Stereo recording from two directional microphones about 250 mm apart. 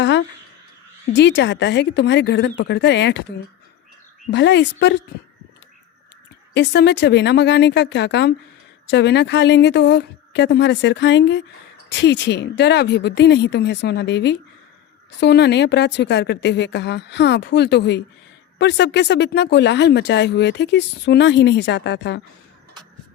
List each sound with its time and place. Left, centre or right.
1.0 s speech: left
4.3 s speech: left
6.5 s speech: left